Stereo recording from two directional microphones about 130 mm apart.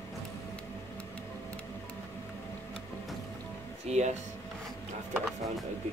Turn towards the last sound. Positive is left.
turn(degrees=-5)  # may be behind; listen again after turning